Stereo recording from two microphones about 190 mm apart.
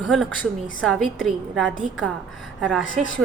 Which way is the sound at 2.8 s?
90° left.